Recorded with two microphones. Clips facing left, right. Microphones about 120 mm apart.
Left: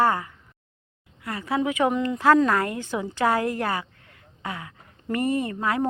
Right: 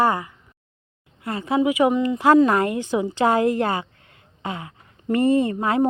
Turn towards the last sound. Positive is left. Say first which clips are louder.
# right 5 dB
turn(degrees=-25)  # may be behind; listen again after turning